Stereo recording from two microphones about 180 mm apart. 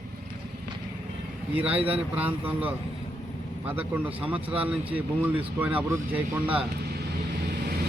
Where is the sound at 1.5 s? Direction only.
10° right (ahead or behind).